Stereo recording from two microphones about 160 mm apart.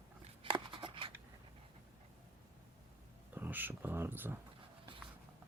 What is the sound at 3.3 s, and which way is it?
Speech, 10° right (ahead or behind).